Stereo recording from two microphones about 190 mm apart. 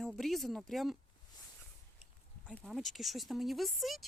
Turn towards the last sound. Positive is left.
turn(degrees=0)  # may be behind; listen again after turning